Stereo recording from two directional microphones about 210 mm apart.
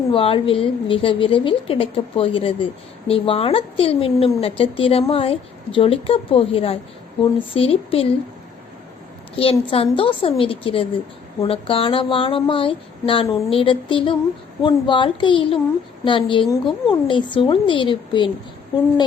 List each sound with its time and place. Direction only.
0.1 s speech: 25° left (ahead or behind)
9.3 s speech: 25° left (ahead or behind)